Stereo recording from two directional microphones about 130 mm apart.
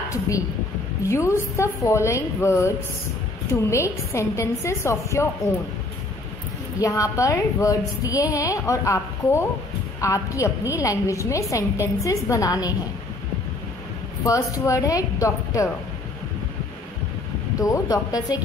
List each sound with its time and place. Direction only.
1.0 s a woman's voice: 20° left (ahead or behind)
3.7 s a woman's voice: 20° left (ahead or behind)
6.8 s a woman's voice: 25° left (ahead or behind)
14.2 s a woman's voice: 25° left (ahead or behind)
17.6 s a woman's voice: 25° left (ahead or behind)